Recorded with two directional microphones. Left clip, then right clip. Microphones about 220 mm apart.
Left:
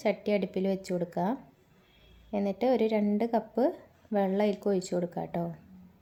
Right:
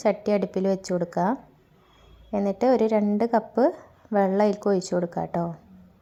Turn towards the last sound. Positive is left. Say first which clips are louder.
# right 6 dB
turn(degrees=-15)  # may be behind; listen again after turning